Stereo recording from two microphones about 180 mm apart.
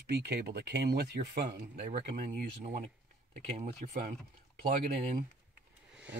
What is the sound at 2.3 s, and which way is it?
Speech, 45° right (ahead or behind).